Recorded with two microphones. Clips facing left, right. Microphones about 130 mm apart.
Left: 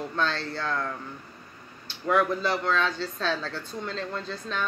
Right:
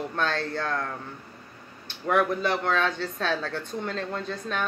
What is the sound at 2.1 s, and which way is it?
Speech, 55° right (ahead or behind).